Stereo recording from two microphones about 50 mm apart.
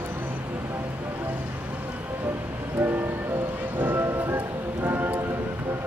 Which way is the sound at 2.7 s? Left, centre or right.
Right.